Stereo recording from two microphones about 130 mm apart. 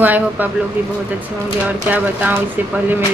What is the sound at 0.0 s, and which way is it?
Speech, 15° right (ahead or behind).